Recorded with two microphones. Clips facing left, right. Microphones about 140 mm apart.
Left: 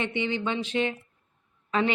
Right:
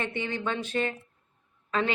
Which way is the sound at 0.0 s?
20° left (ahead or behind).